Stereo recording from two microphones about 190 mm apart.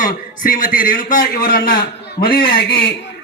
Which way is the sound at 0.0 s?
45° left (ahead or behind).